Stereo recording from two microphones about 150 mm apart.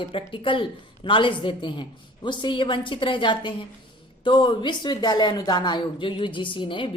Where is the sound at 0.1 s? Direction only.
35° left (ahead or behind).